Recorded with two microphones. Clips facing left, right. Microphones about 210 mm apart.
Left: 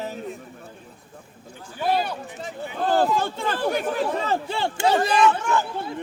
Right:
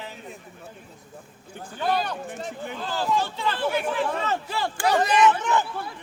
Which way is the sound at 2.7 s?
55° left (ahead or behind).